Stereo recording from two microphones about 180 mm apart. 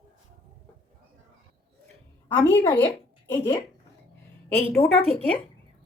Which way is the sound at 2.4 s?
10° left (ahead or behind).